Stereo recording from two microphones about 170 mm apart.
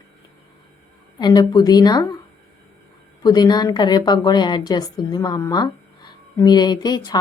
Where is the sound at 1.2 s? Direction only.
25° left (ahead or behind).